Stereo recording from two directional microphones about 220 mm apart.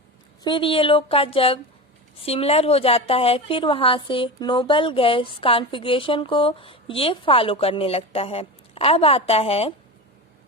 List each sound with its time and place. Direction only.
0.4 s a woman's voice: 25° left (ahead or behind)